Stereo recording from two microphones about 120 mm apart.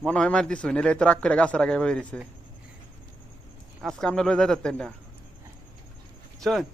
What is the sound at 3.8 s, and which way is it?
Speech, 5° left (ahead or behind).